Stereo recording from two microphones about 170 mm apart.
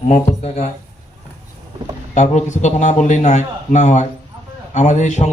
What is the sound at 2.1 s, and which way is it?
A man's voice, 45° left (ahead or behind).